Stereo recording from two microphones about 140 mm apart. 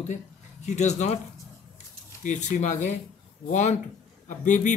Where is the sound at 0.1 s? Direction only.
55° left (ahead or behind).